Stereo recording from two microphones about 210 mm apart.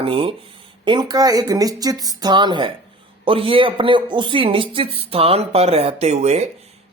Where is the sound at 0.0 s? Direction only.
25° right (ahead or behind).